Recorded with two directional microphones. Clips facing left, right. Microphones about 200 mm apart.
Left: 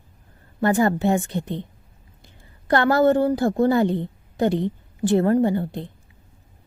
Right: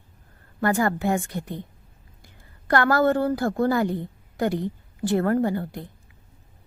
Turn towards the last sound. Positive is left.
turn(degrees=25)  # may be behind; listen again after turning